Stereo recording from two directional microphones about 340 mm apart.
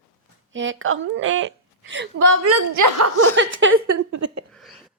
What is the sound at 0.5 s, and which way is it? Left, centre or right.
A woman's voice, right.